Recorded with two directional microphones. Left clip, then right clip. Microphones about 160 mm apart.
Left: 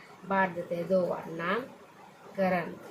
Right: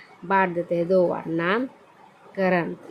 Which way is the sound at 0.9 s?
75° right (ahead or behind).